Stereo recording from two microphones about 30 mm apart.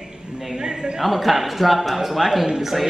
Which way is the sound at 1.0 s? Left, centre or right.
Centre.